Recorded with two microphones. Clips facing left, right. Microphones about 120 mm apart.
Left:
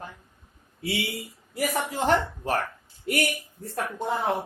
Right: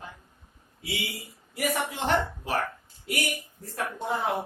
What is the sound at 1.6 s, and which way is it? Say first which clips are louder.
A man's voice: left 2 dB; 40° left (ahead or behind).